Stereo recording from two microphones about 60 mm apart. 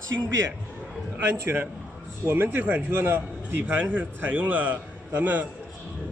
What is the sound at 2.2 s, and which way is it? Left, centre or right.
A man's voice, right.